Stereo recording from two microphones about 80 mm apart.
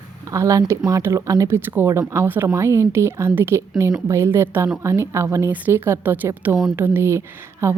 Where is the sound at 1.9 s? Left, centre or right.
Right.